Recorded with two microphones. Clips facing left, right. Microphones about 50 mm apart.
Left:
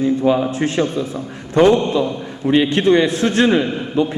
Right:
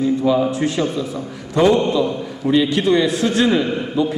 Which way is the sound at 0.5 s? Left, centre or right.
Left.